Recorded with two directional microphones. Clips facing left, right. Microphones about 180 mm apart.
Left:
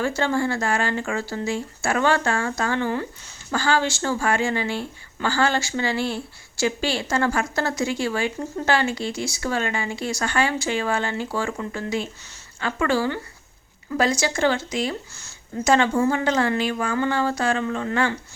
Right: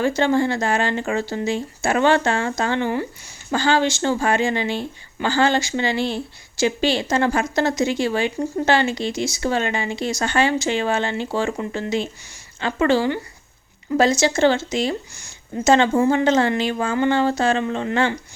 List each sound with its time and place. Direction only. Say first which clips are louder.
0.0 s speech: right 4 dB; 20° right (ahead or behind)
15.1 s a sound: right 2 dB; 15° right (ahead or behind)
15.7 s speech: right 3 dB; 25° right (ahead or behind)